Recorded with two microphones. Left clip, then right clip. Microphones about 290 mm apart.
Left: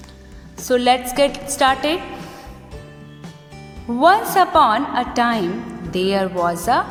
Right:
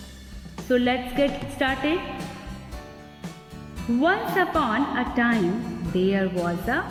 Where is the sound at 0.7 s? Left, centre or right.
Centre.